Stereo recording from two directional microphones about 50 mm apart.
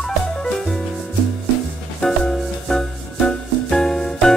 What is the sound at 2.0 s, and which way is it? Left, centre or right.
Music, centre.